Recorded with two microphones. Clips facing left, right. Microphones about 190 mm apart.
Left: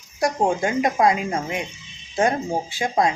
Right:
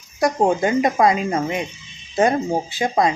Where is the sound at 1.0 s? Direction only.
10° left (ahead or behind).